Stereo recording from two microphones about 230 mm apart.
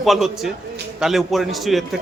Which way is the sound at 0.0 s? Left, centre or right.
Centre.